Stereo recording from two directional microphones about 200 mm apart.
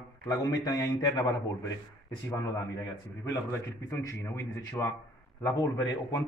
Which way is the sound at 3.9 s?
15° left (ahead or behind).